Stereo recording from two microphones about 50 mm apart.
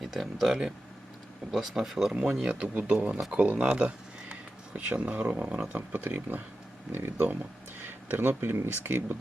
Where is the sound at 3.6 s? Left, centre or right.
Right.